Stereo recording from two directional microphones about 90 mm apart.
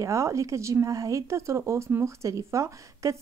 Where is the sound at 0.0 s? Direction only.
35° right (ahead or behind).